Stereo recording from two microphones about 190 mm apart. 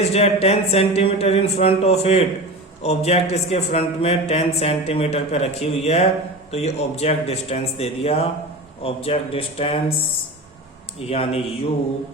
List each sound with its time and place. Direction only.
0.0 s a man's voice: 35° left (ahead or behind)
11.1 s a man's voice: 30° left (ahead or behind)